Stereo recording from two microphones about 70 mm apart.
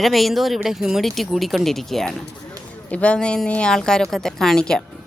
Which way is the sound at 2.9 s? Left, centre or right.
Centre.